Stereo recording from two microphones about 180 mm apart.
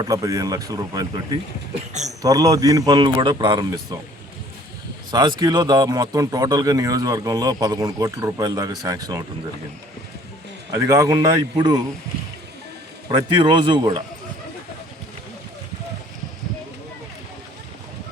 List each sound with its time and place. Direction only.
0.0 s a man's voice: 20° right (ahead or behind)
1.9 s speech: 40° right (ahead or behind)
2.2 s a man's voice: 20° right (ahead or behind)
5.1 s a man's voice: 20° right (ahead or behind)
10.7 s a man's voice: 20° right (ahead or behind)
13.1 s a man's voice: 25° right (ahead or behind)